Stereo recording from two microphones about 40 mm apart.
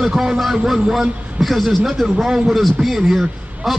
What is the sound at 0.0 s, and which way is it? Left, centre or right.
A man's voice, centre.